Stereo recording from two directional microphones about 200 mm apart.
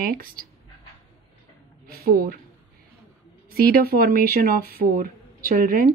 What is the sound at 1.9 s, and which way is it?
Speech, 50° right (ahead or behind).